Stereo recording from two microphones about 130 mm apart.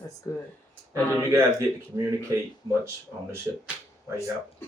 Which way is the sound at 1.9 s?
20° right (ahead or behind).